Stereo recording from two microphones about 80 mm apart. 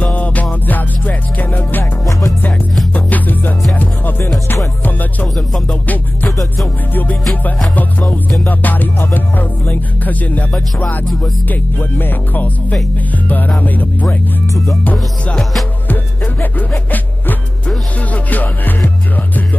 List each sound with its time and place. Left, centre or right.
0.0 s music: centre
2.9 s music: left
5.7 s music: centre
8.5 s music: left
11.4 s speech: left
13.1 s music: left
13.6 s speech: left
14.0 s music: left
15.9 s music: left